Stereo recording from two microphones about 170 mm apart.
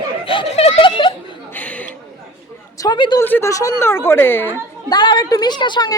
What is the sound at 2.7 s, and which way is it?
Speech, 25° left (ahead or behind).